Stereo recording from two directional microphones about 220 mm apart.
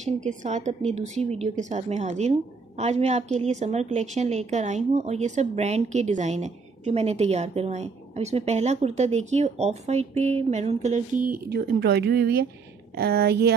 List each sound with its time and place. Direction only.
0.0 s a woman's voice: 35° right (ahead or behind)